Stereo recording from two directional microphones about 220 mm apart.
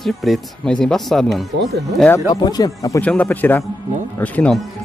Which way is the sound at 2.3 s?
20° left (ahead or behind).